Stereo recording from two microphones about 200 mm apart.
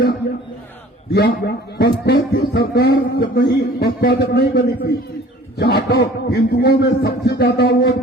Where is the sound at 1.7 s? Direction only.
50° left (ahead or behind).